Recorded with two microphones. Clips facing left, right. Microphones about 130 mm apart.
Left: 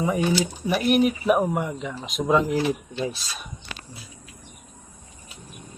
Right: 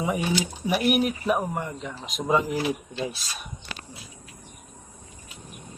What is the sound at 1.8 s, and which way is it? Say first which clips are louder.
Speech: left 4 dB; centre (ahead or behind).